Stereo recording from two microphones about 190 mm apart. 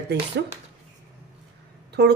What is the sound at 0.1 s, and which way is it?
Speech, 60° right (ahead or behind).